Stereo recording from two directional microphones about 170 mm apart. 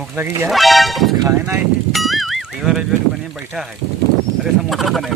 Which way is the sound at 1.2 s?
15° right (ahead or behind).